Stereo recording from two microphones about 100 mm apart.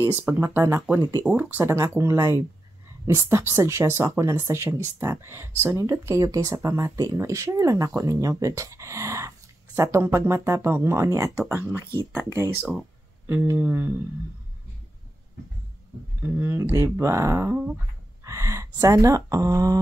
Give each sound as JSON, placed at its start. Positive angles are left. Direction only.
{"t": 0.0, "sound": "speech", "side_deg": -25}
{"t": 16.2, "sound": "speech", "side_deg": -20}